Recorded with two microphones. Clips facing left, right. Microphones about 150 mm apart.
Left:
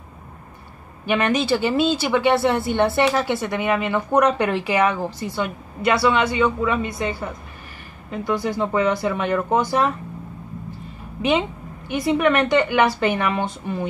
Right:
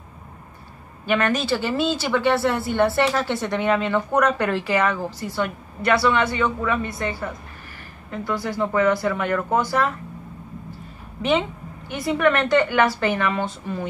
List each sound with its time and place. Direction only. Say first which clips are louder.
1.0 s speech: left 1 dB; 15° left (ahead or behind)
11.9 s speech: left 2 dB; 15° left (ahead or behind)